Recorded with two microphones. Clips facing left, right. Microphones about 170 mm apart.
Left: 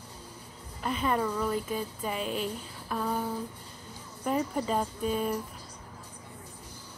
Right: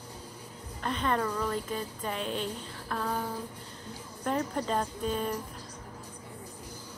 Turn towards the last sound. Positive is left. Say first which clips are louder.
# left 2 dB
turn(degrees=5)  # may be behind; listen again after turning